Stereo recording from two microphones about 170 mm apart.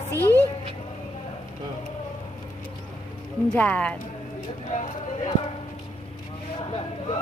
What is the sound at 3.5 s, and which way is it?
Speech, 10° left (ahead or behind).